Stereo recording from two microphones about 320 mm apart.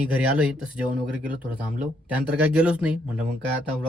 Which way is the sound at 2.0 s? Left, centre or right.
Centre.